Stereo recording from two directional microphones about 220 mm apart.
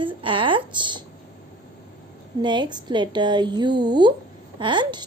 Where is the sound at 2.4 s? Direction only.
20° right (ahead or behind).